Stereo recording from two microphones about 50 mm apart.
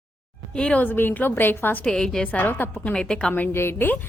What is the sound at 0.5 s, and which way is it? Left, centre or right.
Speech, centre.